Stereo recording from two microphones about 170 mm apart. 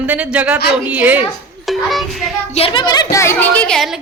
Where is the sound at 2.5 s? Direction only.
30° left (ahead or behind).